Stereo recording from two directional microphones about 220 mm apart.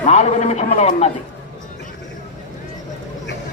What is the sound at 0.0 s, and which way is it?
A man's voice, 30° left (ahead or behind).